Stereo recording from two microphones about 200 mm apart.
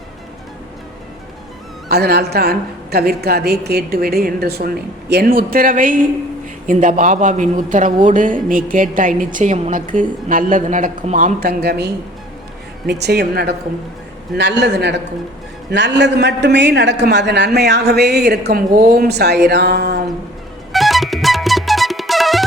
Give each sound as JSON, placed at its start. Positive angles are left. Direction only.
{"t": 1.9, "sound": "a woman's voice", "side_deg": -55}
{"t": 20.7, "sound": "music", "side_deg": 0}